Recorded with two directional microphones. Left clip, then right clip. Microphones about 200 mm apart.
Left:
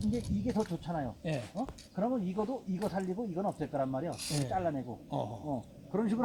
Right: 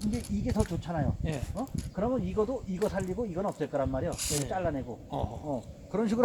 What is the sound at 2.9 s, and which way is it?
Speech, 30° right (ahead or behind).